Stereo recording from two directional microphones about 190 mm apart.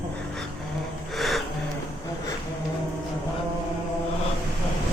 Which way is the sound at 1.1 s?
Centre (ahead or behind).